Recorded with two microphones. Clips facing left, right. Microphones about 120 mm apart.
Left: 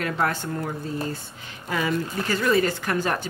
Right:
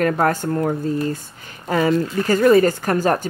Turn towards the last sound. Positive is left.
turn(degrees=-40)  # may be behind; listen again after turning